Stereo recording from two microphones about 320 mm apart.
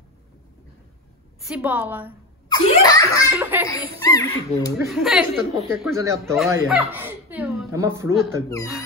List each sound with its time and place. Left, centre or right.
1.5 s a woman's voice: centre
2.5 s laughter: centre
3.3 s speech: centre
4.1 s speech: centre
4.7 s a woman's voice: centre